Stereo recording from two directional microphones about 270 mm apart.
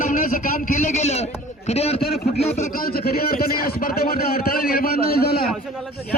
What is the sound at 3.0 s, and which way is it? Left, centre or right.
A man's voice, left.